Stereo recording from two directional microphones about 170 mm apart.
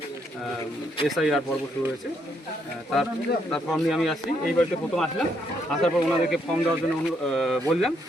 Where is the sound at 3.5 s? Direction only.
Centre (ahead or behind).